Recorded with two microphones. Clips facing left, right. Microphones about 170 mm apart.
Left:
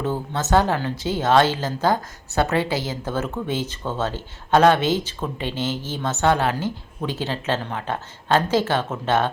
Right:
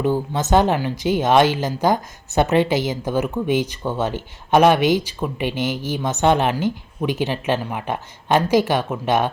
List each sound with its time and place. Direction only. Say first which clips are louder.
0.0 s a woman's voice: right 5 dB; 15° right (ahead or behind)